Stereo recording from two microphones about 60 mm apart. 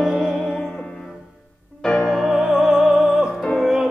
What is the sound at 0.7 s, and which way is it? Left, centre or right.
Music, centre.